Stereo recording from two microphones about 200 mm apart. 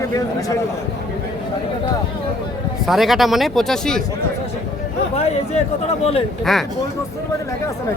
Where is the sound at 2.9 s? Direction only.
Centre (ahead or behind).